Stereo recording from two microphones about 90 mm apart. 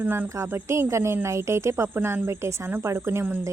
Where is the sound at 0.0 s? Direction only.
20° right (ahead or behind).